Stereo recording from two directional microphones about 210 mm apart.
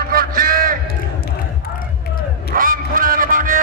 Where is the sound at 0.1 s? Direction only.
45° right (ahead or behind).